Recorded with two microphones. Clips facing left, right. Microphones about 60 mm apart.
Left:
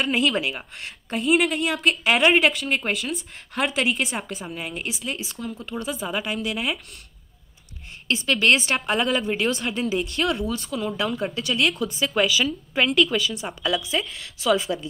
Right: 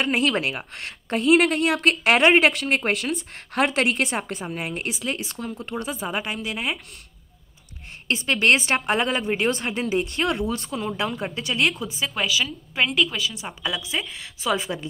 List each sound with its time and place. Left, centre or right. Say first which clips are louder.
0.2 s a woman's voice: even; right
2.5 s a woman's voice: right 2 dB; right
5.9 s speech: left 1 dB; right
8.1 s a woman's voice: even; right
11.0 s speech: left 1 dB; right
11.7 s speech: left 3 dB; centre
12.2 s a woman's voice: left 4 dB; centre; by 14.8 s right